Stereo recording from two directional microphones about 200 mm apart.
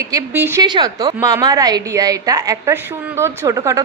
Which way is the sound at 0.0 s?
10° right (ahead or behind).